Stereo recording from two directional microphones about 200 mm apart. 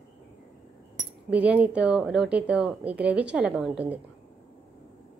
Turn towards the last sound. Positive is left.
turn(degrees=-5)  # may be behind; listen again after turning